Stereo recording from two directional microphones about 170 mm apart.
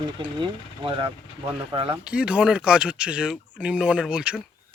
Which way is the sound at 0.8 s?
30° right (ahead or behind).